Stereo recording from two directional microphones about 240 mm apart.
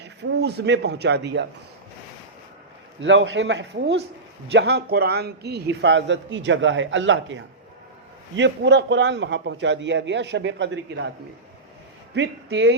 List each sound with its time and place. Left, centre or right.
0.0 s a man's voice: right
3.0 s a man's voice: right
12.1 s a man's voice: right